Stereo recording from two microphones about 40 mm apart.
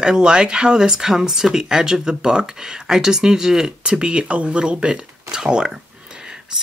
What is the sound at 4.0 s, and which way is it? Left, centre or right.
Speech, right.